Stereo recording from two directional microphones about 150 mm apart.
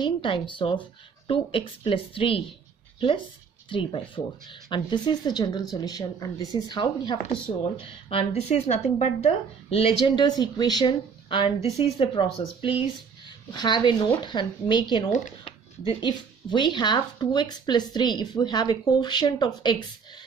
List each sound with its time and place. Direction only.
0.0 s speech: 35° left (ahead or behind)
3.6 s speech: 35° left (ahead or behind)